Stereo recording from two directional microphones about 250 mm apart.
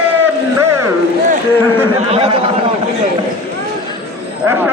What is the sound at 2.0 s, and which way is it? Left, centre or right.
Speech, right.